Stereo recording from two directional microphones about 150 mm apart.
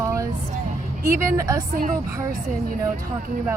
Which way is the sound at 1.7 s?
60° right (ahead or behind).